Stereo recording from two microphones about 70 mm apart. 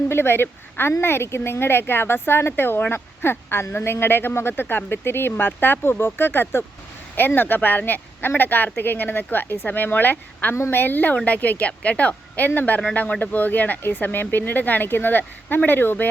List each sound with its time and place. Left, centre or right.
0.1 s speech: left